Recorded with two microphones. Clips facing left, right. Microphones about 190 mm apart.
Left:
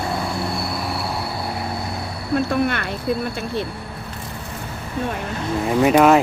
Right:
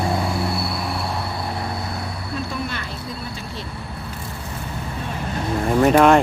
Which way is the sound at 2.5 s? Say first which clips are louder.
Left 8 dB; 60° left (ahead or behind).